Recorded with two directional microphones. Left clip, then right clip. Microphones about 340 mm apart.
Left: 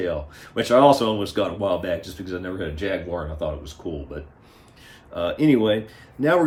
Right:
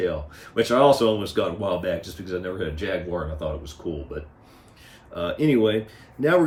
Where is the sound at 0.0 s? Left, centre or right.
Centre.